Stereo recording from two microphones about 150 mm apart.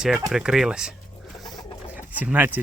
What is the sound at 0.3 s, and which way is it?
Speech, 5° right (ahead or behind).